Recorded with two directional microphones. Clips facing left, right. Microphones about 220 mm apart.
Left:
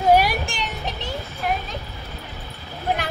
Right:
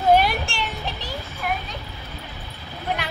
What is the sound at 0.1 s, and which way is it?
Children playing, 10° left (ahead or behind).